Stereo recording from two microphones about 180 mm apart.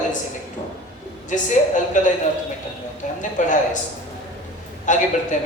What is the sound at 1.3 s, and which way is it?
Speech, 45° left (ahead or behind).